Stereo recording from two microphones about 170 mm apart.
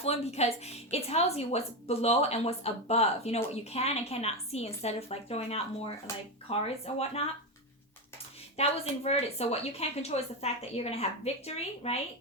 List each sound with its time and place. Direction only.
0.0 s a woman's voice: 40° left (ahead or behind)
8.5 s a woman's voice: 40° left (ahead or behind)